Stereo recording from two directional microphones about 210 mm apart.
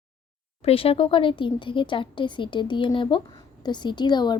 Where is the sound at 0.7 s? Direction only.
25° left (ahead or behind).